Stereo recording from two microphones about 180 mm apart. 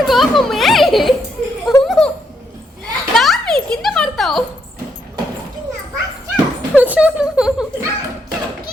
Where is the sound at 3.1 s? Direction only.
Centre (ahead or behind).